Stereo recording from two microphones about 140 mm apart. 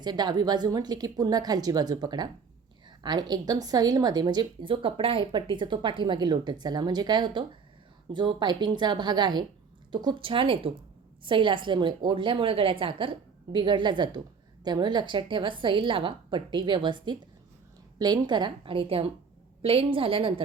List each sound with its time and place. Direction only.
0.0 s a woman's voice: 30° right (ahead or behind)